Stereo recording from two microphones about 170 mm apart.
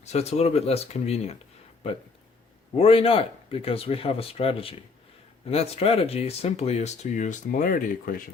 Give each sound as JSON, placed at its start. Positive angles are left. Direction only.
{"t": 0.0, "sound": "speech", "side_deg": 40}
{"t": 2.7, "sound": "speech", "side_deg": 35}